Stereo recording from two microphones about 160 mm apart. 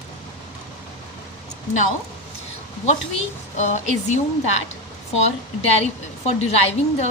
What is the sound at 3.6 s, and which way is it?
Speech, 45° left (ahead or behind).